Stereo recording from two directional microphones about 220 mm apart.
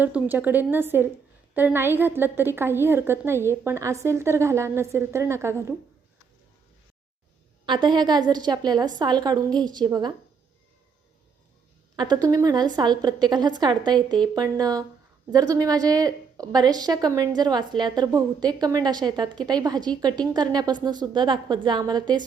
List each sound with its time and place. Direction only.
0.0 s a woman's voice: 5° right (ahead or behind)
7.6 s a woman's voice: 20° right (ahead or behind)
11.9 s a woman's voice: 20° right (ahead or behind)